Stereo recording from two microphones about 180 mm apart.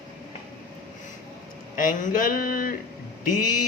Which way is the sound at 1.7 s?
50° left (ahead or behind).